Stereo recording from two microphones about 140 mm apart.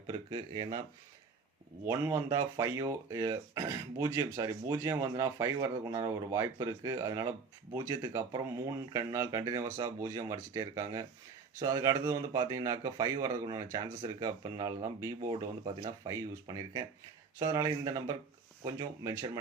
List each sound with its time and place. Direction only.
0.1 s speech: 35° right (ahead or behind)
1.8 s speech: 20° right (ahead or behind)